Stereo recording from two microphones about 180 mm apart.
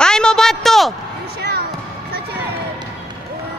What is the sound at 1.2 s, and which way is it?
Basketball bounce, 65° right (ahead or behind).